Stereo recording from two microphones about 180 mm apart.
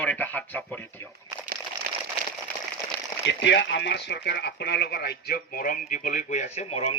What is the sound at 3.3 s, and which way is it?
Speech, 75° left (ahead or behind).